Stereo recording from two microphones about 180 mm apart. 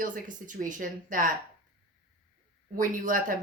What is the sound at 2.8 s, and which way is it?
Speech, 50° right (ahead or behind).